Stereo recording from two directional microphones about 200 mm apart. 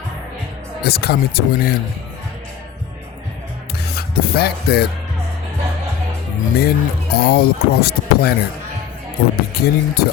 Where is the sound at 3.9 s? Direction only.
50° left (ahead or behind).